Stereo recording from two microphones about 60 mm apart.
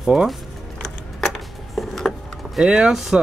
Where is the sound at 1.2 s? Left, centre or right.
Centre.